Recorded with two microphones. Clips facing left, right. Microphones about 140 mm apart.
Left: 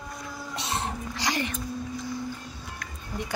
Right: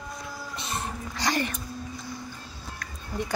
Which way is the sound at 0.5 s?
75° left (ahead or behind).